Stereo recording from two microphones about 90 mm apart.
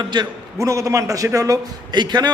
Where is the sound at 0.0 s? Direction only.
55° right (ahead or behind).